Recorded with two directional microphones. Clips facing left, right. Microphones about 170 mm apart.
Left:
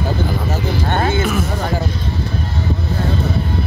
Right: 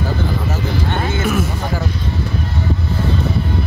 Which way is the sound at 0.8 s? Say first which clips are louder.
Left 3 dB; 50° left (ahead or behind).